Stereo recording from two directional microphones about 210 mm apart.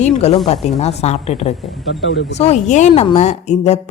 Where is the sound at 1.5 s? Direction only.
Centre (ahead or behind).